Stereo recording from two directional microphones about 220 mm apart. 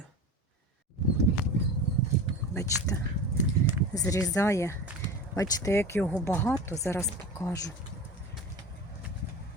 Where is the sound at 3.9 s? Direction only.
15° left (ahead or behind).